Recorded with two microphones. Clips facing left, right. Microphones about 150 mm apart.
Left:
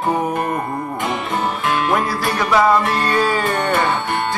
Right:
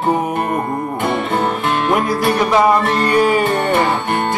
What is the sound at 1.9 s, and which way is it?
Music, 20° right (ahead or behind).